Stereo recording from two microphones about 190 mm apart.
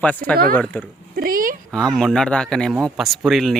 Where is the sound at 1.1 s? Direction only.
50° right (ahead or behind).